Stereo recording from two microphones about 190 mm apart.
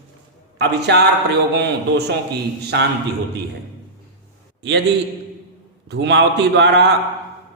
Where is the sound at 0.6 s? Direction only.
60° right (ahead or behind).